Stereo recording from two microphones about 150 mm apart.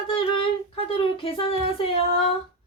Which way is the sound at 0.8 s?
40° left (ahead or behind).